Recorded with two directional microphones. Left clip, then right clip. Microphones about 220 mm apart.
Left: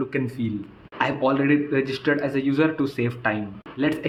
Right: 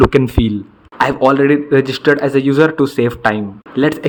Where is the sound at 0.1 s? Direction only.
40° right (ahead or behind).